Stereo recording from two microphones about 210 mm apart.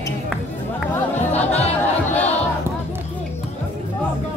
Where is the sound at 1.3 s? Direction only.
30° left (ahead or behind).